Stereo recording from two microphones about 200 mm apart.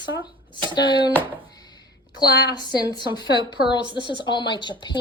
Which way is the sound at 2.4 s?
20° left (ahead or behind).